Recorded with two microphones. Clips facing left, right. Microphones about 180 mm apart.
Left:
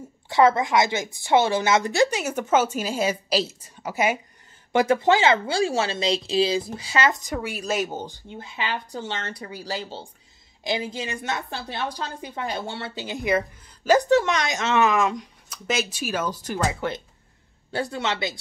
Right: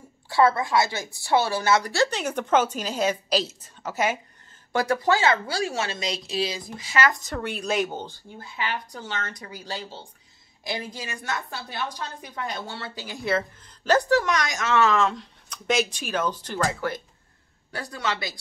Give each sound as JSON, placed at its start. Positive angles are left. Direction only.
{"t": 0.3, "sound": "a woman's voice", "side_deg": 20}
{"t": 4.7, "sound": "a woman's voice", "side_deg": 20}
{"t": 7.2, "sound": "a woman's voice", "side_deg": 10}
{"t": 8.3, "sound": "a woman's voice", "side_deg": 20}
{"t": 17.6, "sound": "a woman's voice", "side_deg": 25}